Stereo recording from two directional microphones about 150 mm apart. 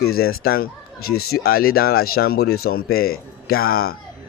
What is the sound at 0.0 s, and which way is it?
Speech, 90° left.